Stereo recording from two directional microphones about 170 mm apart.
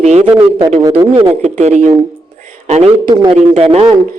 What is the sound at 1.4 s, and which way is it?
A man's voice, 40° right (ahead or behind).